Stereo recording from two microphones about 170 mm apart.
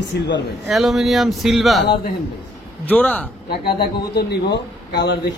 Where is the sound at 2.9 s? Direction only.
10° left (ahead or behind).